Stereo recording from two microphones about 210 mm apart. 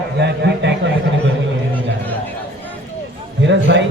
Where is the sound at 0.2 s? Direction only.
55° right (ahead or behind).